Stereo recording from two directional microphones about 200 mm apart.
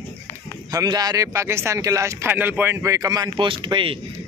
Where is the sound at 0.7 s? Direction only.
20° right (ahead or behind).